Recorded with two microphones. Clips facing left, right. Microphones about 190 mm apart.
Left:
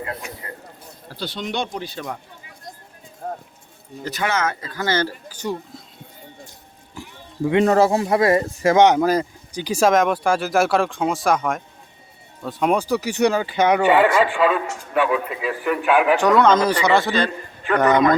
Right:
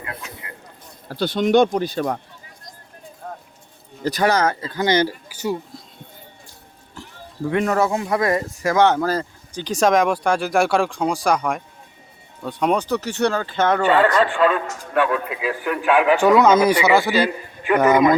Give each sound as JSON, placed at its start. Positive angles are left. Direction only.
{"t": 1.1, "sound": "speech", "side_deg": -55}
{"t": 3.2, "sound": "clip-clop", "side_deg": 40}
{"t": 4.0, "sound": "speech", "side_deg": -35}
{"t": 6.9, "sound": "a sound", "side_deg": 10}
{"t": 7.5, "sound": "speech", "side_deg": 30}